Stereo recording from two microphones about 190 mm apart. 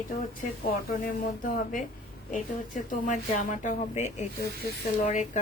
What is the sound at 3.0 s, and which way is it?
Speech, 40° left (ahead or behind).